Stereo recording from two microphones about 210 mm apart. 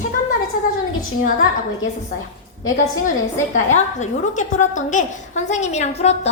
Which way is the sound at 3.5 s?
35° left (ahead or behind).